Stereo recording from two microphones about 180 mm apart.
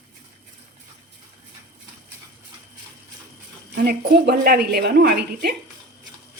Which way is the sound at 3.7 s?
60° right (ahead or behind).